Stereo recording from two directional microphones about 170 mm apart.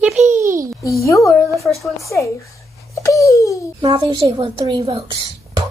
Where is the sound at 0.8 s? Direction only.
20° left (ahead or behind).